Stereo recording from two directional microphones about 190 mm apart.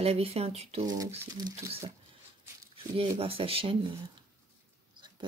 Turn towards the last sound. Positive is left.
turn(degrees=-25)  # may be behind; listen again after turning